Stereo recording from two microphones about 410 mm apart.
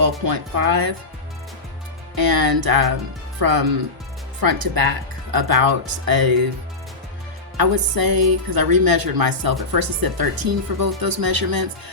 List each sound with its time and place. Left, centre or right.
0.3 s speech: right
2.1 s a woman's voice: right
7.5 s a woman's voice: right